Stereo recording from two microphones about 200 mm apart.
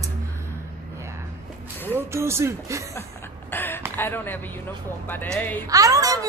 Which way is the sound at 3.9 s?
10° left (ahead or behind).